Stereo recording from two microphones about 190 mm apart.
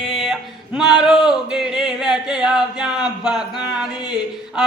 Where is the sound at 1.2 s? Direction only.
5° right (ahead or behind).